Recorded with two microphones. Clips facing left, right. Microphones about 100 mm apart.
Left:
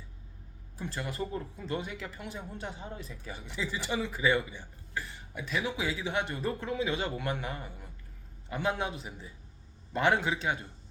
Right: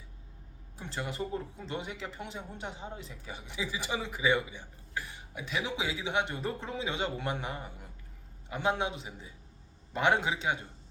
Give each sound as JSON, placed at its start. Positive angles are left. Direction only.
{"t": 0.8, "sound": "a man's voice", "side_deg": -20}